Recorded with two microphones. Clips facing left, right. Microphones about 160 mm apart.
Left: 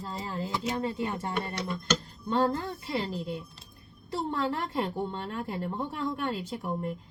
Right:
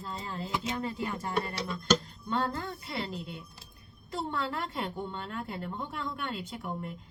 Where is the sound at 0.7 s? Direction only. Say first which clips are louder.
Left 3 dB; 30° left (ahead or behind).